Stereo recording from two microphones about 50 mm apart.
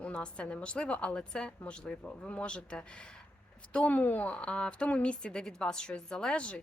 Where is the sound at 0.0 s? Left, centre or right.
Left.